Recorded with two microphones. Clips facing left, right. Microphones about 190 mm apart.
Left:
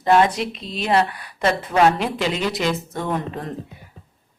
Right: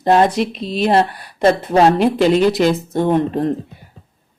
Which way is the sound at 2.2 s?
50° right (ahead or behind).